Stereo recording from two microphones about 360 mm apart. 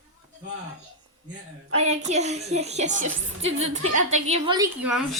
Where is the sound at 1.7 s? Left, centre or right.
Centre.